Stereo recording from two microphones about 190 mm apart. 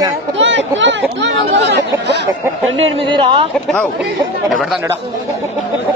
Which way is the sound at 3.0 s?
25° right (ahead or behind).